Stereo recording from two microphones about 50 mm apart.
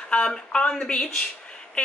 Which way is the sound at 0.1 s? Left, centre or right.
Centre.